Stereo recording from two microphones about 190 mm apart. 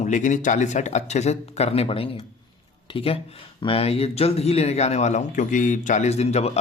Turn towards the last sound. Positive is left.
turn(degrees=35)  # may be behind; listen again after turning